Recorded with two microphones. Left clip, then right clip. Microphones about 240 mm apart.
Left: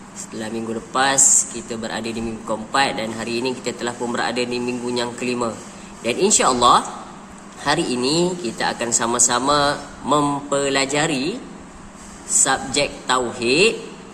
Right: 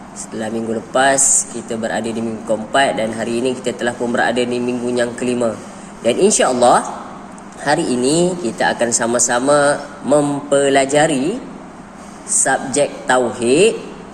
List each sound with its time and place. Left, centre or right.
0.4 s speech: centre
12.4 s speech: centre